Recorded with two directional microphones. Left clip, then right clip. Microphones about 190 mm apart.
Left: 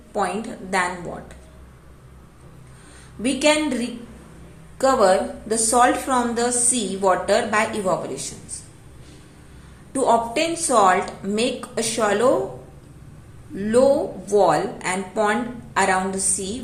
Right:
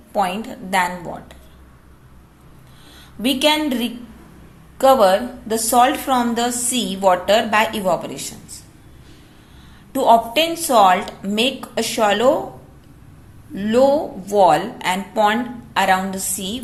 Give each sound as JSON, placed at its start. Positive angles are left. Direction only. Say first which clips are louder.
{"t": 0.1, "sound": "a woman's voice", "louder": "right 4 dB", "side_deg": -25}
{"t": 3.2, "sound": "a woman's voice", "louder": "right 2 dB", "side_deg": -25}
{"t": 9.9, "sound": "a woman's voice", "louder": "right 5 dB", "side_deg": -30}
{"t": 13.6, "sound": "a woman's voice", "louder": "right 2 dB", "side_deg": -30}